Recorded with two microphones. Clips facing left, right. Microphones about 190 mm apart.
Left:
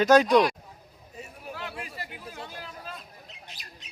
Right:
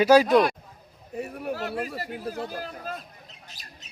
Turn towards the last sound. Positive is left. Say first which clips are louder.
# left 1 dB
turn(degrees=-40)  # may be behind; listen again after turning